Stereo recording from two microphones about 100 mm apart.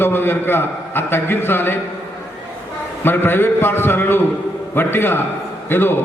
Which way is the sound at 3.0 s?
20° left (ahead or behind).